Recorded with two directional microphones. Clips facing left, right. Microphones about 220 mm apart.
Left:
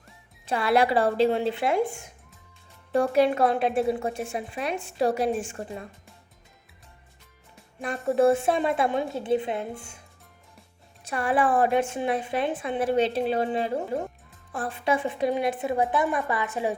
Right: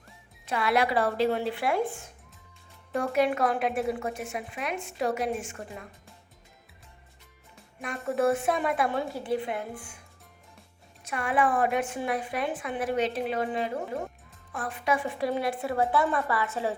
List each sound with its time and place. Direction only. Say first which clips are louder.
0.4 s a woman's voice: left 4 dB; 30° left (ahead or behind); by 2.0 s 15° left (ahead or behind)
2.9 s a woman's voice: left 4 dB; 30° left (ahead or behind)
7.8 s a woman's voice: left 5 dB; 30° left (ahead or behind)
11.0 s a woman's voice: left 3 dB; 35° left (ahead or behind); by 16.7 s 15° left (ahead or behind)